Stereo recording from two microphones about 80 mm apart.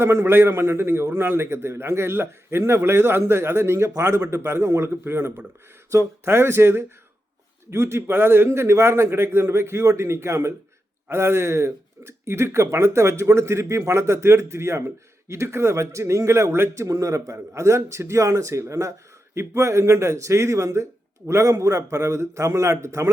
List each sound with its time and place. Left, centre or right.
0.0 s a man's voice: right